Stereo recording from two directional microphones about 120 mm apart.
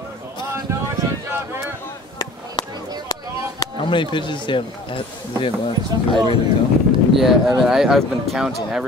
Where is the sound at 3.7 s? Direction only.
45° left (ahead or behind).